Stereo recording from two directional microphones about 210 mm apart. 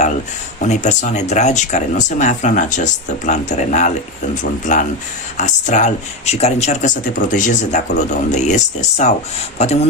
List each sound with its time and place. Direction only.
0.6 s speech: 35° left (ahead or behind)